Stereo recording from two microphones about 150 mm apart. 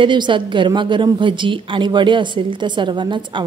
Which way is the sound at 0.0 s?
30° right (ahead or behind).